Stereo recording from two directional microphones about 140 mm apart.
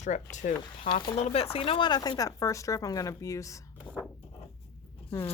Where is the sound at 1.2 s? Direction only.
45° left (ahead or behind); by 3.6 s 20° left (ahead or behind).